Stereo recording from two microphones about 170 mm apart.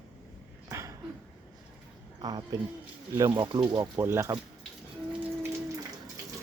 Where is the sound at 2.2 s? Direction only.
25° right (ahead or behind).